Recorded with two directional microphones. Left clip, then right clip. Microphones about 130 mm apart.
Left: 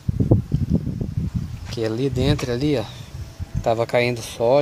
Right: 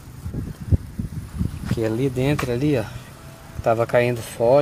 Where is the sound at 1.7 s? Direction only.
25° left (ahead or behind).